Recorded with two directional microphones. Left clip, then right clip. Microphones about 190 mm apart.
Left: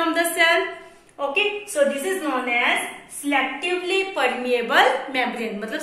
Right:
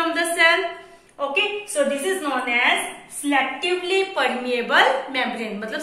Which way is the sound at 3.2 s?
10° left (ahead or behind).